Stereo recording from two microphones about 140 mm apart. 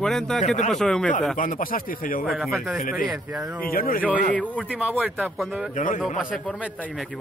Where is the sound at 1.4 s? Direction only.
75° left (ahead or behind); by 2.2 s 90° left.